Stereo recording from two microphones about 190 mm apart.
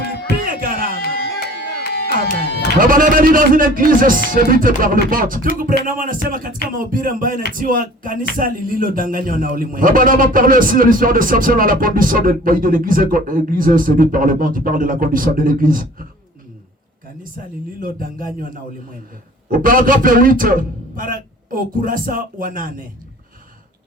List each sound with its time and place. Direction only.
0.4 s a sound: 45° right (ahead or behind)
1.0 s music: 55° left (ahead or behind)
2.7 s a man's voice: 45° right (ahead or behind)
17.3 s a man's voice: 45° right (ahead or behind)